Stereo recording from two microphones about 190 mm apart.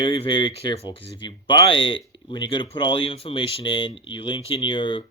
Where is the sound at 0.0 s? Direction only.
25° left (ahead or behind).